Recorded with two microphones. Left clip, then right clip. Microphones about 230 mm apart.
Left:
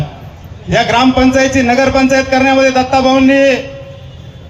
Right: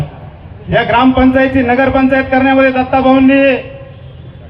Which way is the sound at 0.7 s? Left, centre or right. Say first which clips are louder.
Even; left.